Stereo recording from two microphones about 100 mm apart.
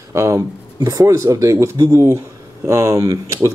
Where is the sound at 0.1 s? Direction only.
30° right (ahead or behind).